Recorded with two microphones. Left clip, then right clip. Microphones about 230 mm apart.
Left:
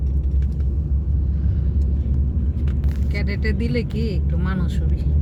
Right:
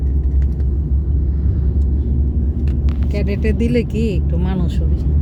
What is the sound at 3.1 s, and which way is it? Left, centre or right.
Speech, centre.